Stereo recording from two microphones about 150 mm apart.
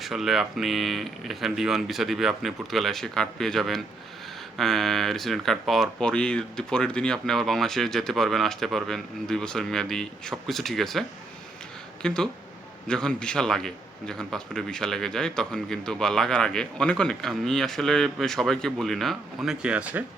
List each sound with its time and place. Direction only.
0.0 s a man's voice: centre (ahead or behind)
12.0 s a man's voice: 5° left (ahead or behind)